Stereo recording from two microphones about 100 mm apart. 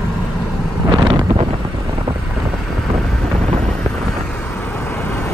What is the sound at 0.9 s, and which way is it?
Wind noise, 55° right (ahead or behind).